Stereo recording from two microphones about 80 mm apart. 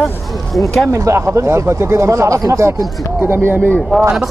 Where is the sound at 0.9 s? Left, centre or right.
Right.